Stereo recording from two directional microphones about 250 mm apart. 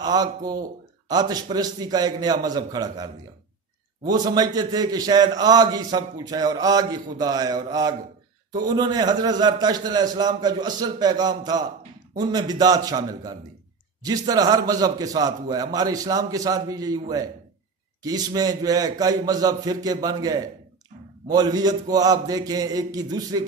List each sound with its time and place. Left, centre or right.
0.0 s a man's voice: centre